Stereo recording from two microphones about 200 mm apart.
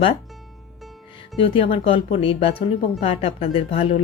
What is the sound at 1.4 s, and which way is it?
Speech, 25° left (ahead or behind).